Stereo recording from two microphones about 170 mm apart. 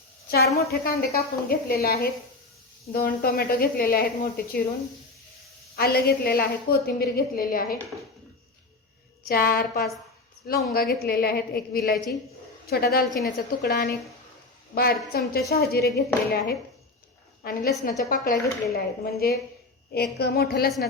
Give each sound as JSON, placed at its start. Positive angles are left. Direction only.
{"t": 0.3, "sound": "a woman's voice", "side_deg": 65}
{"t": 5.7, "sound": "a woman's voice", "side_deg": 65}
{"t": 9.2, "sound": "a woman's voice", "side_deg": 60}
{"t": 13.1, "sound": "a woman's voice", "side_deg": 0}
{"t": 13.3, "sound": "a woman's voice", "side_deg": 70}
{"t": 14.8, "sound": "a woman's voice", "side_deg": 65}
{"t": 17.4, "sound": "a woman's voice", "side_deg": 60}